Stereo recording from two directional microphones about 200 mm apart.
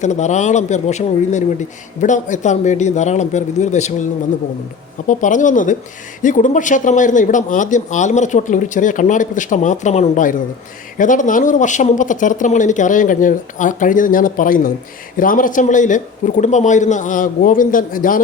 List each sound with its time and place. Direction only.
0.0 s a man's voice: 35° left (ahead or behind)